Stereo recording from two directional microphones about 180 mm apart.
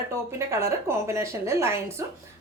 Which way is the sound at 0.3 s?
15° right (ahead or behind).